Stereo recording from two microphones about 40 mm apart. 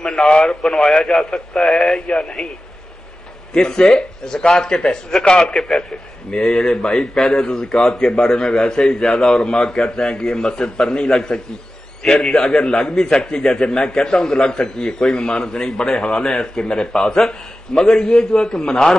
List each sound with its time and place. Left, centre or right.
0.0 s a man's voice: centre
3.5 s a man's voice: centre
6.3 s a man's voice: centre